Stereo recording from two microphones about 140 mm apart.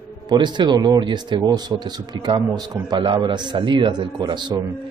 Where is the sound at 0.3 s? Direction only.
35° right (ahead or behind).